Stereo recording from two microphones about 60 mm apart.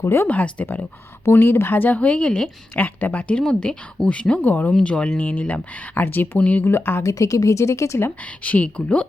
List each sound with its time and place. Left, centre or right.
0.0 s a woman's voice: left
0.3 s speech: left
1.2 s a woman's voice: left; by 2.5 s centre
2.7 s speech: left
3.3 s a woman's voice: centre
6.7 s a woman's voice: left
7.0 s speech: left
8.4 s speech: left